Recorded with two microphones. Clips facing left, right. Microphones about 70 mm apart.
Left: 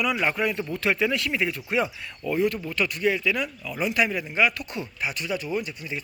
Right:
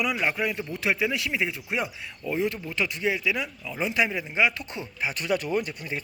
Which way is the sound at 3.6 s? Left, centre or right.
Right.